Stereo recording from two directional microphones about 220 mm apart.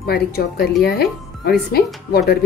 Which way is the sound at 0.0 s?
45° left (ahead or behind).